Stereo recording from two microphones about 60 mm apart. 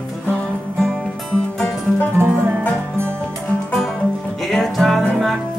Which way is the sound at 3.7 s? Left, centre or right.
Centre.